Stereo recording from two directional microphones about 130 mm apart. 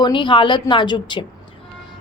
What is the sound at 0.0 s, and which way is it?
A woman's voice, 40° left (ahead or behind).